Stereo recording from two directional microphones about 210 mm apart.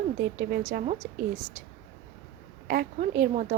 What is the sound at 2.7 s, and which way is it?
Speech, 40° right (ahead or behind).